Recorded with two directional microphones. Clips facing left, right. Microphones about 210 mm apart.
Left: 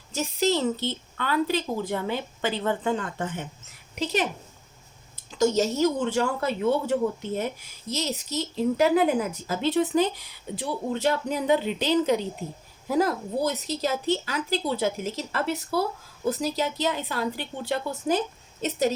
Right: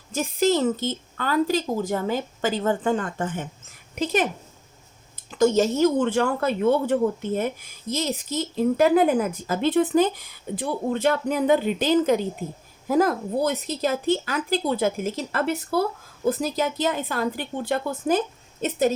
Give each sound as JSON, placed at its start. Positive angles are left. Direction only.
{"t": 0.1, "sound": "a woman's voice", "side_deg": -50}
{"t": 5.4, "sound": "a woman's voice", "side_deg": -55}